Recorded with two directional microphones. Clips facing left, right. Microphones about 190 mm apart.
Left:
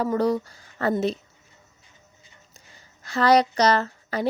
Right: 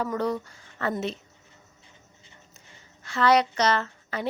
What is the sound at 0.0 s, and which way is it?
Speech, 35° left (ahead or behind).